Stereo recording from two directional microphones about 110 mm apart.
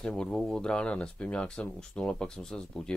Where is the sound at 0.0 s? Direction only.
5° left (ahead or behind).